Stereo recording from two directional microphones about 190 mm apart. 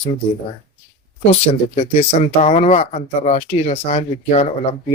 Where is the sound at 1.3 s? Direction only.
35° left (ahead or behind).